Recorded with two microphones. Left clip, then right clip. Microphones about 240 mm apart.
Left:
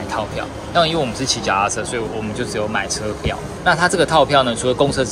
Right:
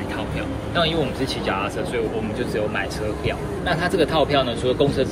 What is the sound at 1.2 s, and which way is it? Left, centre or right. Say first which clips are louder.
Speech: left 4 dB; left.